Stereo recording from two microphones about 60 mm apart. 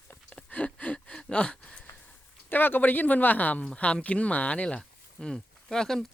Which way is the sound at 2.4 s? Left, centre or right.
Left.